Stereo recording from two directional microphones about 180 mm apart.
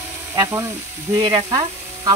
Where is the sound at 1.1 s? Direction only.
20° right (ahead or behind).